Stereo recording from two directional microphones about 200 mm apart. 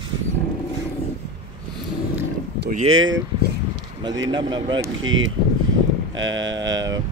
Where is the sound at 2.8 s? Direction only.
80° right.